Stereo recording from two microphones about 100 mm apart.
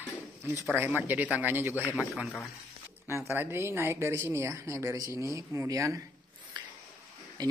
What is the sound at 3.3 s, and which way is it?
Speech, 25° right (ahead or behind).